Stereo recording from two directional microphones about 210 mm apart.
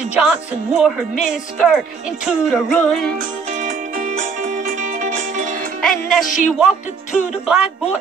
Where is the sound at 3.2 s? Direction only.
35° right (ahead or behind).